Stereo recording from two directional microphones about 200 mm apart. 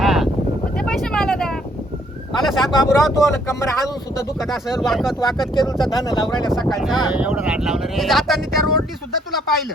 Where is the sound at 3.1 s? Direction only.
15° left (ahead or behind).